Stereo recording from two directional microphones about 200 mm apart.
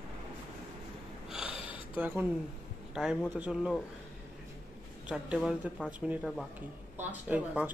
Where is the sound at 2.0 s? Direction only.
10° right (ahead or behind).